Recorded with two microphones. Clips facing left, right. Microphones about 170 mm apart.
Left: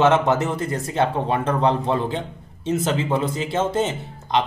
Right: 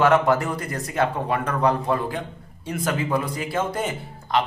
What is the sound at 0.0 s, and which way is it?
Speech, 20° left (ahead or behind).